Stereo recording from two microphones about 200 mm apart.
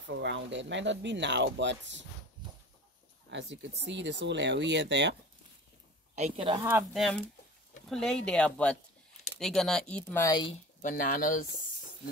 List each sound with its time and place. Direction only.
0.1 s speech: 60° right (ahead or behind)
3.3 s speech: 60° right (ahead or behind)
6.1 s speech: 30° right (ahead or behind)
6.9 s speech: centre (ahead or behind)
10.0 s speech: 15° left (ahead or behind)
10.8 s speech: 40° left (ahead or behind)